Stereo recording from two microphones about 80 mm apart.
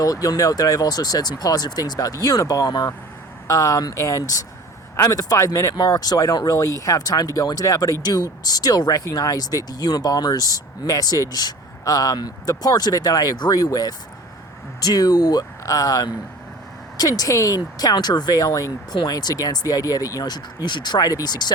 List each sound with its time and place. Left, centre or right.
0.0 s speech: left
3.4 s speech: left
5.7 s speech: left